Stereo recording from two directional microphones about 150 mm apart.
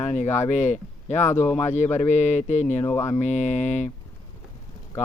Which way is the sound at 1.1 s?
15° left (ahead or behind).